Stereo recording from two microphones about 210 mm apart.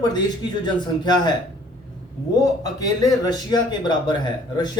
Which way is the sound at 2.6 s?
20° left (ahead or behind).